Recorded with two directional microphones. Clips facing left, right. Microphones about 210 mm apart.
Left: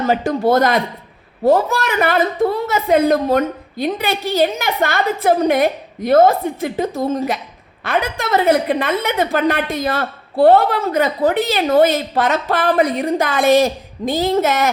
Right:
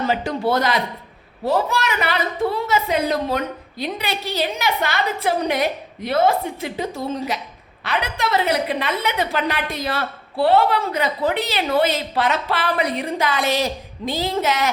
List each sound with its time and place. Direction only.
0.1 s a woman's voice: 45° left (ahead or behind)